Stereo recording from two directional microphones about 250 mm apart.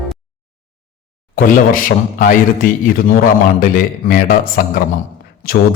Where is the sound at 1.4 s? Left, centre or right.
Left.